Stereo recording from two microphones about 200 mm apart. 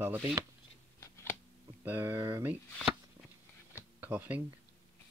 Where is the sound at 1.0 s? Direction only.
10° left (ahead or behind).